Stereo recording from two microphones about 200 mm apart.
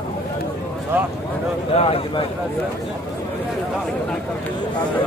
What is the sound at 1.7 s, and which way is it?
Speech, 30° left (ahead or behind).